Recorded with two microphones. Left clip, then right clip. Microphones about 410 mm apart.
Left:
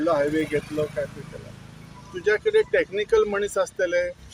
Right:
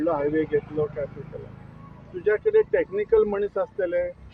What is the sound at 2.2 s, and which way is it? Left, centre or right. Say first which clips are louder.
Speech: even; right.